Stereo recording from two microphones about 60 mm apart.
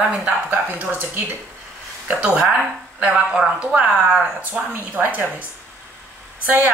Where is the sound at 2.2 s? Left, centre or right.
Right.